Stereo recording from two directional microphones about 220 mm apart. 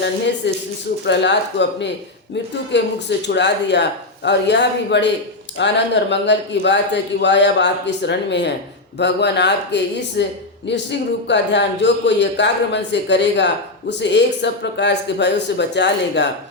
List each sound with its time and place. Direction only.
0.4 s speech: 55° left (ahead or behind)